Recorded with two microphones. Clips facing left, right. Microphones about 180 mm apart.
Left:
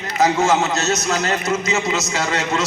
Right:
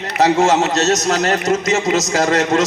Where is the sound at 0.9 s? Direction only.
40° right (ahead or behind).